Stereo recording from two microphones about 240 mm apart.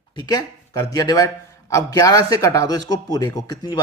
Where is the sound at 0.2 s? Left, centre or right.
Centre.